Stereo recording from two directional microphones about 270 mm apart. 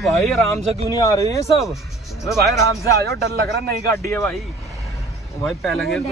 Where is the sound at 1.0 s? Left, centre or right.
Centre.